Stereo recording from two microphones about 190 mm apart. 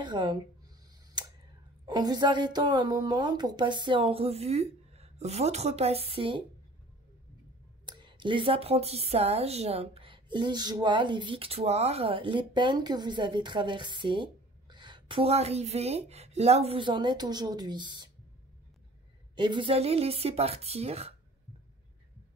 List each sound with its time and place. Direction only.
0.0 s speech: 25° right (ahead or behind)
1.9 s a woman's voice: 20° right (ahead or behind)
7.8 s a woman's voice: 25° right (ahead or behind)
19.3 s a woman's voice: 25° right (ahead or behind)